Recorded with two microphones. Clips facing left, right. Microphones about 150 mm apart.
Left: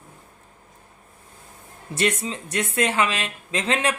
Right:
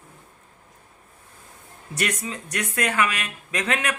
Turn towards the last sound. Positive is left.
turn(degrees=30)  # may be behind; listen again after turning